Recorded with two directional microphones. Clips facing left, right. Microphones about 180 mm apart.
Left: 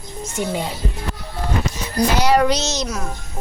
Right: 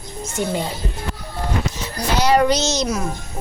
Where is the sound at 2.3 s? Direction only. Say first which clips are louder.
Right 1 dB; centre (ahead or behind).